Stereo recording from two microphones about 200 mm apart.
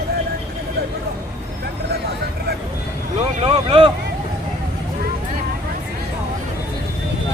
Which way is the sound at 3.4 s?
25° right (ahead or behind).